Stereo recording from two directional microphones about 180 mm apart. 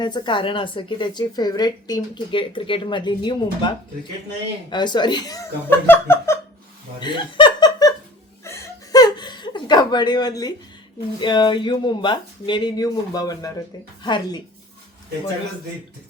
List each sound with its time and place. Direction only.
0.0 s a woman's voice: 25° left (ahead or behind)
4.7 s a woman's voice: 25° left (ahead or behind)
7.0 s chuckle: 25° left (ahead or behind)
11.2 s a woman's voice: 25° left (ahead or behind)